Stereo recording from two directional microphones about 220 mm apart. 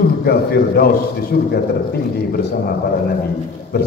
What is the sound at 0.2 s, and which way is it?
A man's voice, 45° left (ahead or behind).